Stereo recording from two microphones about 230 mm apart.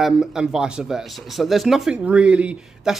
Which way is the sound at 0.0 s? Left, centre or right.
Centre.